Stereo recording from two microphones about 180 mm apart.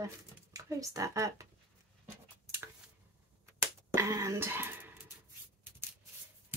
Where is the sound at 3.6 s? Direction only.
15° right (ahead or behind).